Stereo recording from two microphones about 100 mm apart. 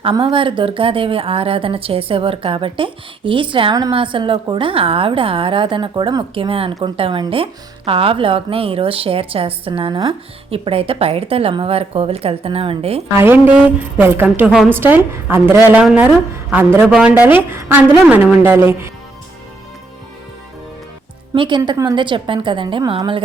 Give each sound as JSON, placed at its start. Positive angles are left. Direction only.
{"t": 0.0, "sound": "a woman's voice", "side_deg": -60}
{"t": 10.5, "sound": "a woman's voice", "side_deg": -70}
{"t": 13.1, "sound": "a woman's voice", "side_deg": -20}
{"t": 21.3, "sound": "a woman's voice", "side_deg": -55}